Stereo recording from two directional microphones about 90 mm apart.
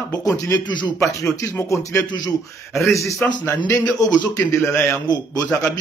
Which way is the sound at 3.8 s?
50° left (ahead or behind).